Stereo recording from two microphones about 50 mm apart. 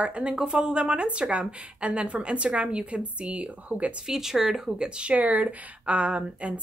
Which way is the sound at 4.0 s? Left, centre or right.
Centre.